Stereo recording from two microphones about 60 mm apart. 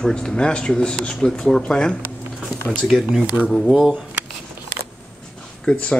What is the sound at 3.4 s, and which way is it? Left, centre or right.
Speech, right.